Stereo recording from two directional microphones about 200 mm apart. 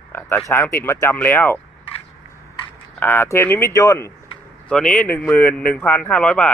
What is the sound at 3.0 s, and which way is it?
Speech, 10° left (ahead or behind).